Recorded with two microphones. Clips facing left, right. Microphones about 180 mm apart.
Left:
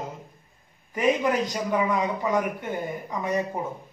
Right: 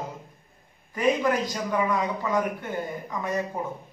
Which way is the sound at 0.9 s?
15° left (ahead or behind).